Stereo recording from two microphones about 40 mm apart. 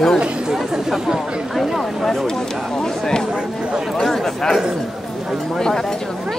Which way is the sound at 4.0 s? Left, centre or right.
Centre.